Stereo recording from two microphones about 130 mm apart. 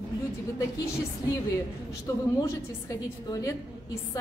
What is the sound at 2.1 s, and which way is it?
Speech, 25° left (ahead or behind).